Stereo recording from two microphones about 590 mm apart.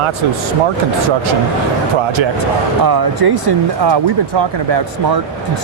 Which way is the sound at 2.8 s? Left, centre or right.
Right.